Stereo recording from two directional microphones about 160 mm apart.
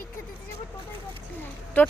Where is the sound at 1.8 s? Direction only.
10° left (ahead or behind).